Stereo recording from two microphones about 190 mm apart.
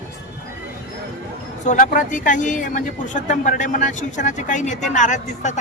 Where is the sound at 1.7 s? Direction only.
40° left (ahead or behind).